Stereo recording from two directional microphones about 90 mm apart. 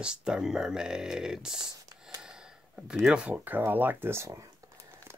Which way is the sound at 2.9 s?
10° right (ahead or behind).